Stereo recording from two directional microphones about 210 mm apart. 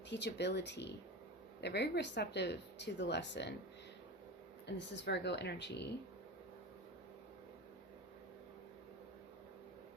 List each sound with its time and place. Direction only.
0.1 s speech: 55° left (ahead or behind)
4.6 s speech: 55° left (ahead or behind)